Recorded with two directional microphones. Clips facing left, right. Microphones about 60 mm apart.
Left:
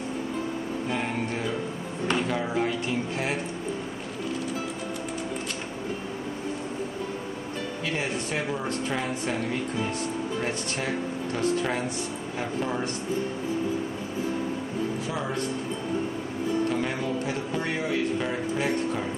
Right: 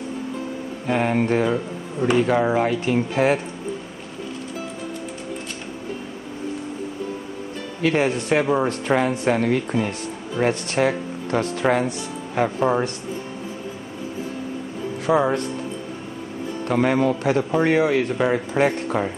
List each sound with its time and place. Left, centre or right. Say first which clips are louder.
0.8 s mantra: right 12 dB; right
2.2 s speech: right 8 dB; right
7.8 s speech: right 12 dB; right
10.4 s mantra: right 10 dB; right
11.3 s speech: right 7 dB; right
15.0 s speech: right 11 dB; right
16.6 s speech: right 8 dB; right